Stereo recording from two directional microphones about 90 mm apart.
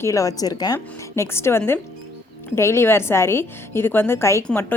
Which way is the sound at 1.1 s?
30° left (ahead or behind).